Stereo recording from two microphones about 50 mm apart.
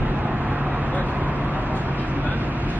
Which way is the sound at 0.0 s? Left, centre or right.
Right.